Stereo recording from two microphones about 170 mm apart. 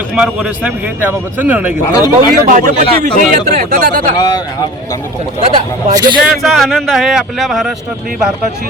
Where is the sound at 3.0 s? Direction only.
50° right (ahead or behind).